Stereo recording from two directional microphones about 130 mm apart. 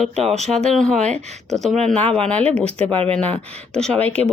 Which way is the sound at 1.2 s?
60° right (ahead or behind).